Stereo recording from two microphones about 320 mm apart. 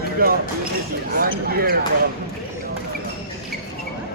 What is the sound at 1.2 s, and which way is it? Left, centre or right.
Speech, right.